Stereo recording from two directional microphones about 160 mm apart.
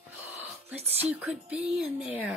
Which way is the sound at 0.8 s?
10° right (ahead or behind).